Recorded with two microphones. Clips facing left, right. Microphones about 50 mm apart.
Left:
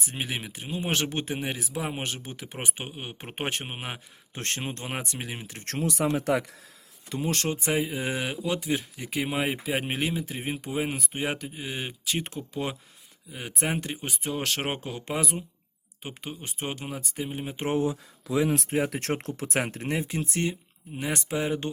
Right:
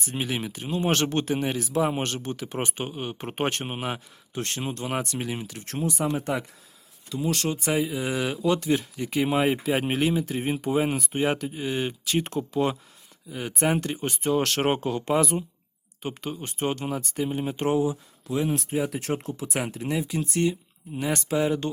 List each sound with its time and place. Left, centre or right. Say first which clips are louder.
0.0 s speech: right 4 dB; centre
4.4 s speech: right 2 dB; left; by 5.5 s centre
5.6 s speech: left 1 dB; left
7.1 s speech: right 2 dB; left
7.5 s speech: right 2 dB; left
8.4 s speech: right 7 dB; centre
18.4 s speech: even; left
20.9 s speech: right 4 dB; centre